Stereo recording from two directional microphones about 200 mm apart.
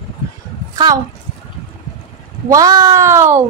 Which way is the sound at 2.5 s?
15° right (ahead or behind).